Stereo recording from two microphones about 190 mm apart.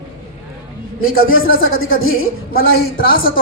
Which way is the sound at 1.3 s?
90° left.